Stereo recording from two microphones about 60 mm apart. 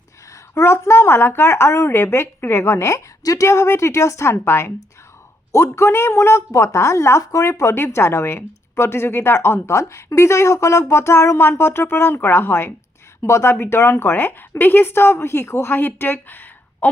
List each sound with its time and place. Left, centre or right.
0.5 s a woman's voice: left
13.2 s a woman's voice: left
15.7 s a woman's voice: left